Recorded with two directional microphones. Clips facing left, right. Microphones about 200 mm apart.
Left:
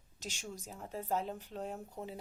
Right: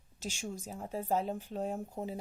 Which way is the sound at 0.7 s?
40° right (ahead or behind).